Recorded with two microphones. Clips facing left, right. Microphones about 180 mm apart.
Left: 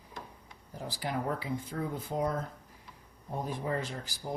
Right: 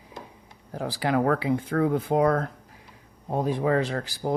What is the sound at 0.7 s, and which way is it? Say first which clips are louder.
Speech: right 10 dB; 80° right.